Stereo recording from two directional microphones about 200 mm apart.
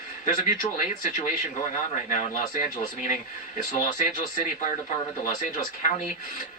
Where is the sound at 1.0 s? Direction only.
40° left (ahead or behind).